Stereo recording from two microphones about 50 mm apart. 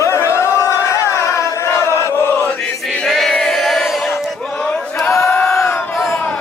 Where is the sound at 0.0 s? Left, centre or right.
Left.